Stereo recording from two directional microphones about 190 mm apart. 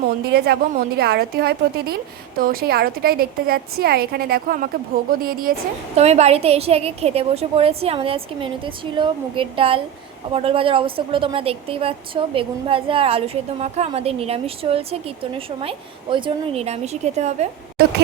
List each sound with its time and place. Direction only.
0.3 s a woman's voice: 60° right (ahead or behind)
6.0 s a woman's voice: 35° right (ahead or behind)